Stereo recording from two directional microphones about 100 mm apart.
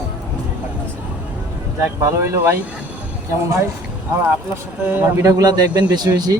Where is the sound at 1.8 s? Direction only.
25° right (ahead or behind).